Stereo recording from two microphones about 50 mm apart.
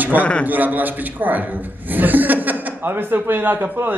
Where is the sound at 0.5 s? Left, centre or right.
Right.